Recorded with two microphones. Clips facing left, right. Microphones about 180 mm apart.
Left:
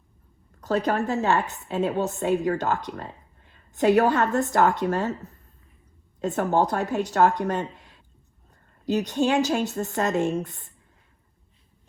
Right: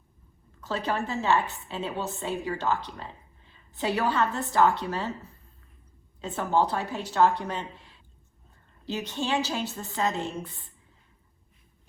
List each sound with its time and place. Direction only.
0.6 s a woman's voice: 40° left (ahead or behind)
8.9 s a woman's voice: 40° left (ahead or behind)